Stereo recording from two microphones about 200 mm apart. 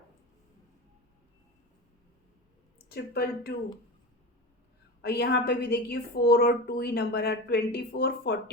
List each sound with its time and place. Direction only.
2.9 s a woman's voice: 55° left (ahead or behind)
5.0 s a woman's voice: 55° left (ahead or behind)